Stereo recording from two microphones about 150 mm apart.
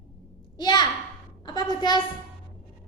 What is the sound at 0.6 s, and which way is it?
A child's voice, 30° left (ahead or behind).